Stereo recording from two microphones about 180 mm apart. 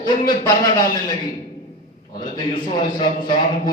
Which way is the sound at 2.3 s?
25° left (ahead or behind).